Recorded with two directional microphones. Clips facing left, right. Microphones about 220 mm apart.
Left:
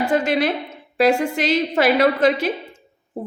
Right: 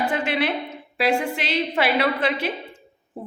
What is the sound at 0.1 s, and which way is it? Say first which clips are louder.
A woman's voice: left 5 dB; 40° left (ahead or behind).